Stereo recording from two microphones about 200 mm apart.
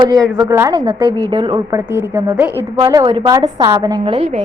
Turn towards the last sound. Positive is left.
turn(degrees=-25)  # may be behind; listen again after turning